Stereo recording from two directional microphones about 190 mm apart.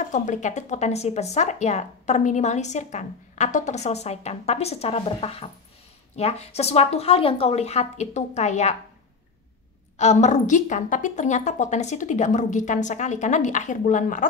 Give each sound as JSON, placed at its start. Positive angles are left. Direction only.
{"t": 0.1, "sound": "speech", "side_deg": 40}
{"t": 9.9, "sound": "speech", "side_deg": 35}